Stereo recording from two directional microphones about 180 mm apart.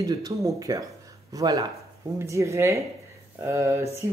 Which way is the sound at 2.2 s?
15° right (ahead or behind).